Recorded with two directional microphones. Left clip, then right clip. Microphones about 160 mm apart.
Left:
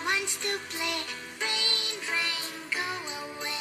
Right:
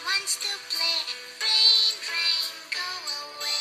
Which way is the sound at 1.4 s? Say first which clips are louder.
Right 6 dB; 40° right (ahead or behind).